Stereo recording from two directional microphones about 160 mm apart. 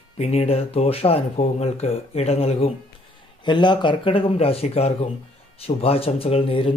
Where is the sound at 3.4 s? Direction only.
30° left (ahead or behind).